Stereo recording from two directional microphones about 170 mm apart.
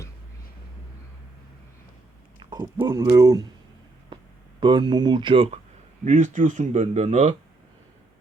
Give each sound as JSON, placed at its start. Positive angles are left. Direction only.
{"t": 2.4, "sound": "speech", "side_deg": -25}
{"t": 4.6, "sound": "speech", "side_deg": -30}
{"t": 6.1, "sound": "speech", "side_deg": -45}